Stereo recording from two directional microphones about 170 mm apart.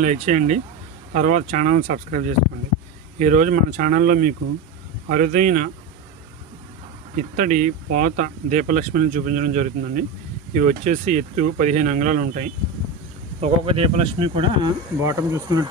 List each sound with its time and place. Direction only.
0.0 s speech: 45° right (ahead or behind)
7.2 s speech: 50° right (ahead or behind)
13.4 s speech: 35° right (ahead or behind)
15.0 s speech: 20° right (ahead or behind)